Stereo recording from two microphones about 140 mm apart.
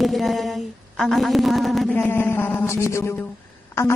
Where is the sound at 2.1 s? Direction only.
15° left (ahead or behind).